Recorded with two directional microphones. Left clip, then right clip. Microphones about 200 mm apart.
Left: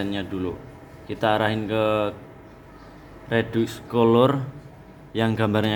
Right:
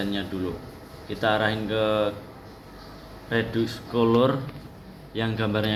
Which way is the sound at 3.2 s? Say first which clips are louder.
Left 2 dB; 65° left (ahead or behind).